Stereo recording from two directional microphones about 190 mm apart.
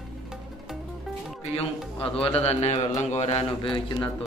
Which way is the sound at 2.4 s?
35° left (ahead or behind).